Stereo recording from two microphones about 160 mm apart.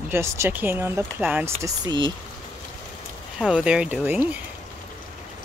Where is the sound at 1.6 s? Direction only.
25° right (ahead or behind).